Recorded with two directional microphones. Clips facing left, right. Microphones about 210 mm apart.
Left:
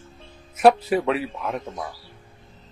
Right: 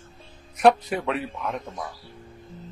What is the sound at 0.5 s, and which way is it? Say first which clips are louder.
A man's voice: left 2 dB; 5° left (ahead or behind).